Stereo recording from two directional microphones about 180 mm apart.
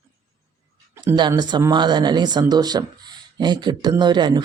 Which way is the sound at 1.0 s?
25° right (ahead or behind).